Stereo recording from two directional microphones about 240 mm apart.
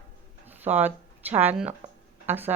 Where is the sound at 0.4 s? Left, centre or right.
Centre.